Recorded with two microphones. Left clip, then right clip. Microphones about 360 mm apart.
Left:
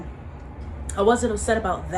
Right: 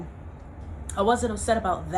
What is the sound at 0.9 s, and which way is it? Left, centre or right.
Speech, centre.